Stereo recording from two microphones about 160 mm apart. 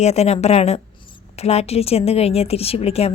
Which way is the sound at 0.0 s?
40° left (ahead or behind).